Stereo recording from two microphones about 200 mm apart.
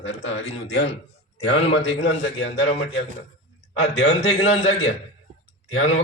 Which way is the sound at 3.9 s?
70° left (ahead or behind).